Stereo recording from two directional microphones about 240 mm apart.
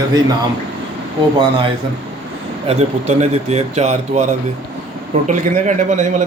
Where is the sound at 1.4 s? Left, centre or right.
Right.